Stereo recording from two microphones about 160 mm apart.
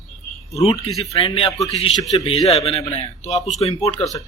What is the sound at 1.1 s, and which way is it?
Speech, 35° left (ahead or behind).